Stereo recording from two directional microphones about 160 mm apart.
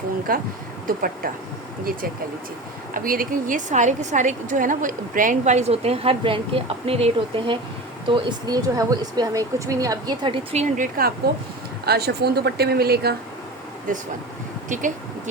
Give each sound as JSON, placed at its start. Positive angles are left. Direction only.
{"t": 0.3, "sound": "speech", "side_deg": -65}
{"t": 2.9, "sound": "a woman's voice", "side_deg": -60}
{"t": 11.9, "sound": "speech", "side_deg": -85}
{"t": 14.7, "sound": "a woman's voice", "side_deg": -50}